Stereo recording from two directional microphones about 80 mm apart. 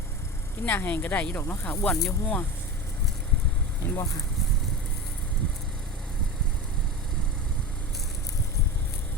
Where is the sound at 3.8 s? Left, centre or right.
Left.